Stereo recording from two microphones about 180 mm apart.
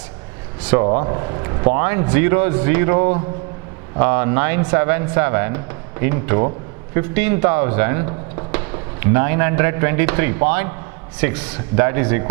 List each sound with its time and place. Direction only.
0.6 s speech: 10° right (ahead or behind)
1.0 s a man's voice: 25° right (ahead or behind)